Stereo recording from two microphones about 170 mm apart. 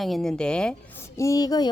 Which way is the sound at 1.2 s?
20° left (ahead or behind).